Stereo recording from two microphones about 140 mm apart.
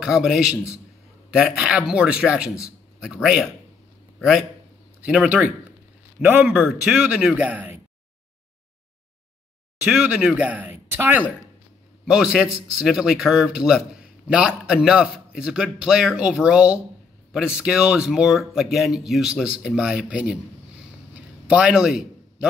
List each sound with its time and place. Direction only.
0.0 s a man's voice: centre (ahead or behind)
9.8 s a man's voice: 10° right (ahead or behind)
21.1 s a sound: 10° right (ahead or behind)